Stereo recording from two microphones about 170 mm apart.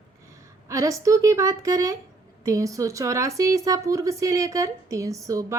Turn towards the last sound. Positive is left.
turn(degrees=-20)  # may be behind; listen again after turning